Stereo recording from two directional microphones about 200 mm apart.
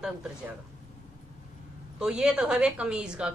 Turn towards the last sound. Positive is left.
turn(degrees=-5)  # may be behind; listen again after turning